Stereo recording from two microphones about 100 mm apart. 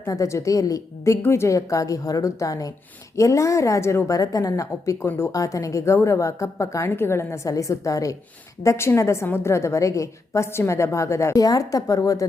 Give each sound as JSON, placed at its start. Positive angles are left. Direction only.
{"t": 0.0, "sound": "a woman's voice", "side_deg": 35}